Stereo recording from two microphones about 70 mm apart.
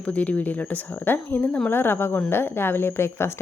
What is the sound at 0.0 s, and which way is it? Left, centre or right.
A woman's voice, centre.